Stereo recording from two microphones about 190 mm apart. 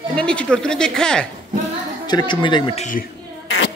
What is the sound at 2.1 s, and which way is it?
Speech, 25° left (ahead or behind).